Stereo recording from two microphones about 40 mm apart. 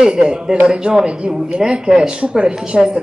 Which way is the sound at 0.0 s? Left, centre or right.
Centre.